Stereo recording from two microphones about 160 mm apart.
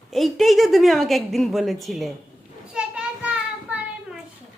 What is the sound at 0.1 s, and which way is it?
A woman's voice, centre (ahead or behind).